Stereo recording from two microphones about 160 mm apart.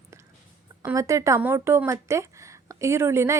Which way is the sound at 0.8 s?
20° right (ahead or behind).